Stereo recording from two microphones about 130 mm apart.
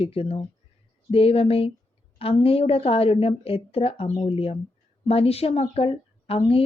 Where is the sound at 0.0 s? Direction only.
50° left (ahead or behind).